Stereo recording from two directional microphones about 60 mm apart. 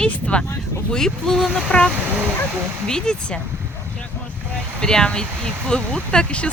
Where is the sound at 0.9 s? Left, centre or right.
Centre.